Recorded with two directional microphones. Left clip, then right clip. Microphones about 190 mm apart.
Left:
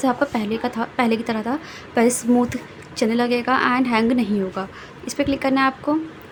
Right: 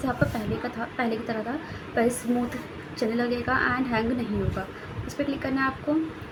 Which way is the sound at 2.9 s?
45° left (ahead or behind).